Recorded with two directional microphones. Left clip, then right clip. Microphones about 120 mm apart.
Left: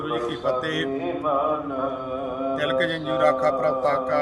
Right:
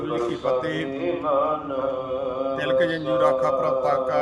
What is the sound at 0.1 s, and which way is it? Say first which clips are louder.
Music: right 1 dB; 85° left.